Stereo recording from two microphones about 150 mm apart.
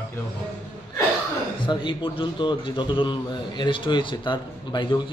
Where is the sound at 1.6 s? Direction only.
35° left (ahead or behind).